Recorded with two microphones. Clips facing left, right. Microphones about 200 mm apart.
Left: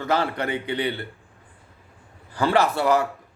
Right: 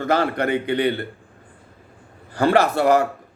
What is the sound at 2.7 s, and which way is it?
Speech, 45° right (ahead or behind).